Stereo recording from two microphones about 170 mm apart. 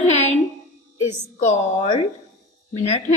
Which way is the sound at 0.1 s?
40° left (ahead or behind).